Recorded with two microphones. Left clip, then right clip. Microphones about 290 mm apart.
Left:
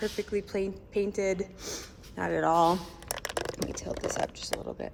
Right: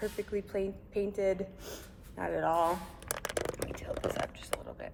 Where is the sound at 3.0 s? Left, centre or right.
Centre.